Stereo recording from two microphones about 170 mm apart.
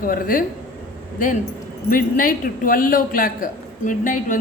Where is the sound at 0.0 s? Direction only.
55° left (ahead or behind).